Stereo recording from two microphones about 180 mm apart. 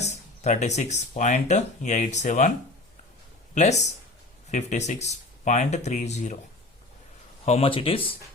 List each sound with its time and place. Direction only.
0.0 s speech: 40° left (ahead or behind)
3.5 s speech: 40° left (ahead or behind)
7.4 s speech: 35° left (ahead or behind)